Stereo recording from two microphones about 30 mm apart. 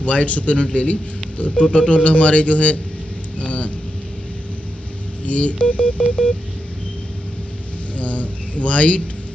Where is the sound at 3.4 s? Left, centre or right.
Left.